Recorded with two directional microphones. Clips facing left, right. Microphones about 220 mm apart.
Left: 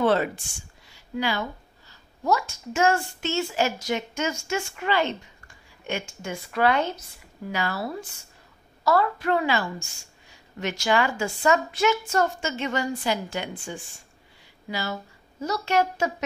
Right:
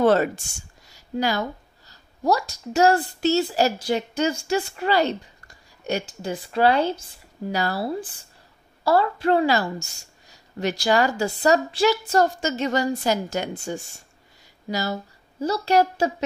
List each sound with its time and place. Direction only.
0.0 s a woman's voice: 45° right (ahead or behind)